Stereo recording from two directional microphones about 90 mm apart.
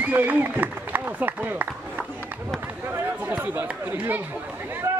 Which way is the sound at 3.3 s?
20° right (ahead or behind).